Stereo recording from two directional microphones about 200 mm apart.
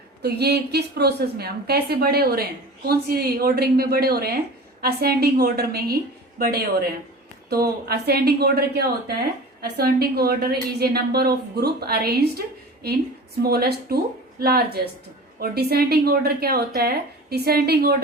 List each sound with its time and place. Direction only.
0.2 s a woman's voice: 55° right (ahead or behind)